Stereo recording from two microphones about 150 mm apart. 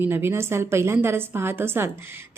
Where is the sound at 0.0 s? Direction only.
15° right (ahead or behind).